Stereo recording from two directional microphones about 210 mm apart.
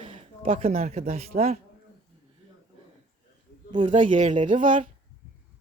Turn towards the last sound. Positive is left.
turn(degrees=-40)  # may be behind; listen again after turning